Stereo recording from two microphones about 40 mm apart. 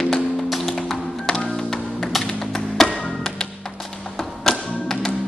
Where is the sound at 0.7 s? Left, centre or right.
Centre.